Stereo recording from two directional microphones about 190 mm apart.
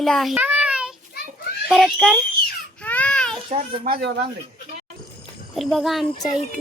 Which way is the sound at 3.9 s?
60° right (ahead or behind).